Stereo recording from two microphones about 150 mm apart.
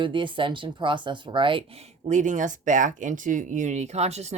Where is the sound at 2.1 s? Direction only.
55° right (ahead or behind).